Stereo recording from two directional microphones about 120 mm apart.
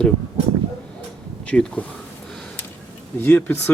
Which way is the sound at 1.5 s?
10° left (ahead or behind).